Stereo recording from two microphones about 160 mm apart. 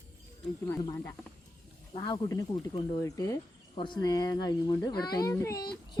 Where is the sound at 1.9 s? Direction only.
30° left (ahead or behind).